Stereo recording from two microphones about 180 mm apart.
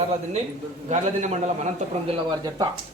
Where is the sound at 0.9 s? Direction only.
40° right (ahead or behind).